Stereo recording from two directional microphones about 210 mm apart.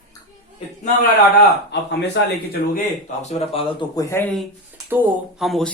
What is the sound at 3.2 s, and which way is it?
Speech, 30° left (ahead or behind).